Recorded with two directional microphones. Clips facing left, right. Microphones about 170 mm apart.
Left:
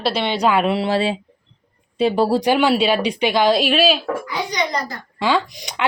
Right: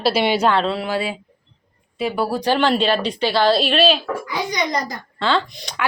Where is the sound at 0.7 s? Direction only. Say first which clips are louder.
Left 4 dB; 30° left (ahead or behind).